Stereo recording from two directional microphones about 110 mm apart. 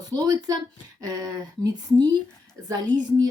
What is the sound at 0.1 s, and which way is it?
Speech, 35° right (ahead or behind).